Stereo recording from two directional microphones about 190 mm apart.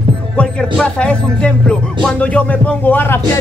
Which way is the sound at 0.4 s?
5° left (ahead or behind).